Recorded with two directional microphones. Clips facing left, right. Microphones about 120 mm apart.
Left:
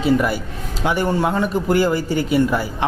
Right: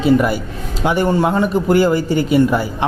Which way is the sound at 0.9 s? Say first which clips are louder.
Right 4 dB; 25° right (ahead or behind).